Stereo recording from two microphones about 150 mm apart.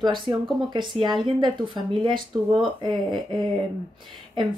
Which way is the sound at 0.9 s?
30° right (ahead or behind).